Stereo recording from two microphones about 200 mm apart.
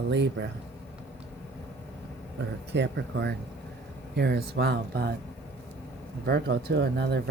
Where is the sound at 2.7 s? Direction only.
60° right (ahead or behind).